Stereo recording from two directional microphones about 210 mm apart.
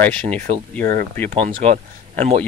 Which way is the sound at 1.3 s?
25° right (ahead or behind).